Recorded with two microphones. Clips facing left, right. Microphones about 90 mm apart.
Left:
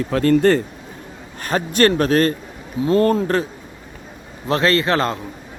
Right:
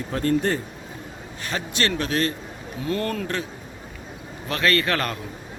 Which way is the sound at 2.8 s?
30° left (ahead or behind).